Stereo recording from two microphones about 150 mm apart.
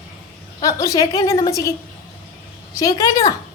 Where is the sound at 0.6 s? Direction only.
20° left (ahead or behind).